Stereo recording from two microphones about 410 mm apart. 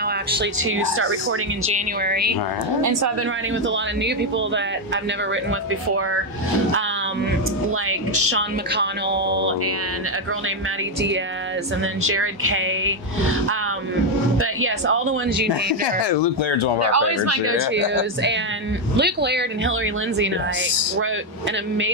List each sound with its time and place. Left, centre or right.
0.4 s speech: right
8.3 s speech: right
12.0 s speech: right
16.0 s speech: left
16.8 s speech: right